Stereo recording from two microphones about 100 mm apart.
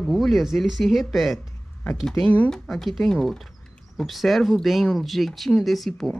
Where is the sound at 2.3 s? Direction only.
10° left (ahead or behind).